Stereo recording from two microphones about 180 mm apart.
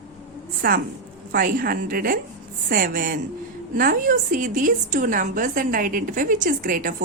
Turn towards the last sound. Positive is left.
turn(degrees=-50)  # may be behind; listen again after turning